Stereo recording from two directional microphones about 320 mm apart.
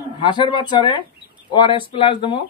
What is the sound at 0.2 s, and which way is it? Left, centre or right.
A man's voice, centre.